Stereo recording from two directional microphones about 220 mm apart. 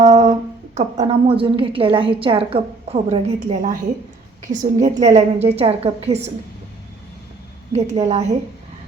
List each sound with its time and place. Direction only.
0.0 s a woman's voice: 30° right (ahead or behind)
7.7 s a woman's voice: 30° right (ahead or behind)